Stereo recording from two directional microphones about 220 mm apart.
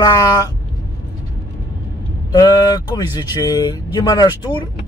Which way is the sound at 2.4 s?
15° left (ahead or behind).